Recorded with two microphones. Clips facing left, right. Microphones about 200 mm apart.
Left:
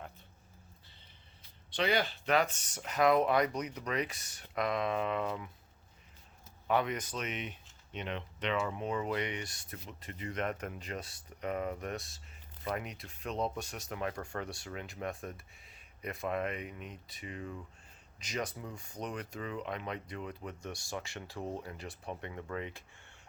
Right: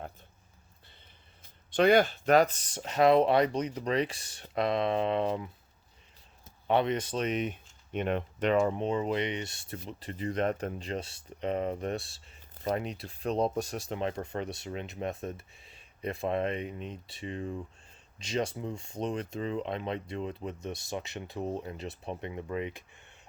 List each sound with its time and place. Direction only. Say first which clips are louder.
1.4 s speech: right 9 dB; 50° right (ahead or behind); by 5.5 s 30° right (ahead or behind)
6.7 s speech: right 5 dB; 30° right (ahead or behind); by 8.8 s 45° right (ahead or behind)
8.8 s speech: right 5 dB; 25° right (ahead or behind)